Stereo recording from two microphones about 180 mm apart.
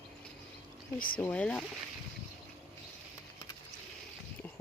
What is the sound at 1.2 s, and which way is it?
Speech, 5° left (ahead or behind).